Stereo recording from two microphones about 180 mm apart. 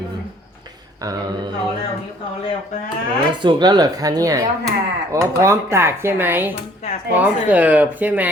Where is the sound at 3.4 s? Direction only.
25° right (ahead or behind).